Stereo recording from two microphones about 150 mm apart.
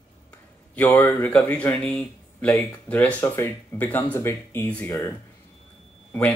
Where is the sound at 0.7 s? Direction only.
15° left (ahead or behind).